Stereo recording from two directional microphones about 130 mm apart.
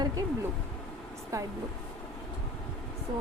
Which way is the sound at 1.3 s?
25° right (ahead or behind).